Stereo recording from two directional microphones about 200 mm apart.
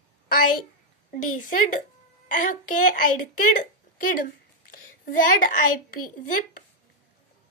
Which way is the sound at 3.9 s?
45° left (ahead or behind).